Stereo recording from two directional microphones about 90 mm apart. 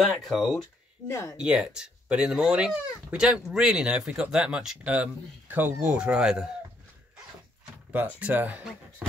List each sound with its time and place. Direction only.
0.2 s speech: centre (ahead or behind)
1.0 s speech: 30° left (ahead or behind)
1.3 s speech: 10° right (ahead or behind)
7.9 s speech: 15° right (ahead or behind)